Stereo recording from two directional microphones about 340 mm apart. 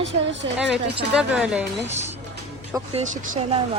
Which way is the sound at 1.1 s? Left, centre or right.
Centre.